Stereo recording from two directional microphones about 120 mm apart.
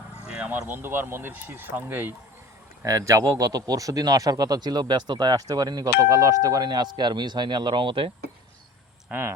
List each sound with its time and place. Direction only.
0.3 s speech: 10° right (ahead or behind); by 8.1 s 45° right (ahead or behind)
9.0 s speech: 15° right (ahead or behind)